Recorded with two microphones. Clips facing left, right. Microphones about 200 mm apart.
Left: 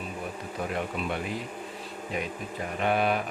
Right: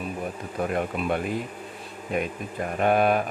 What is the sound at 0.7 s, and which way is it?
Speech, 50° right (ahead or behind).